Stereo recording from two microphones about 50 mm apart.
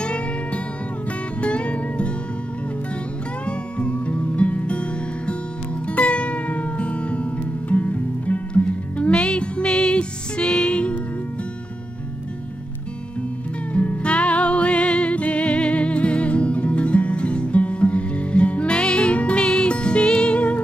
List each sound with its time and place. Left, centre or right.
0.0 s music: left
3.4 s music: left
13.7 s music: left